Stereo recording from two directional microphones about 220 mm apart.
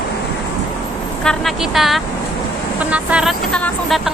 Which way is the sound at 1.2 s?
Centre (ahead or behind).